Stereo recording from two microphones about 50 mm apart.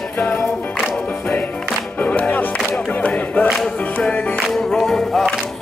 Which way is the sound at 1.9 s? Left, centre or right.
Left.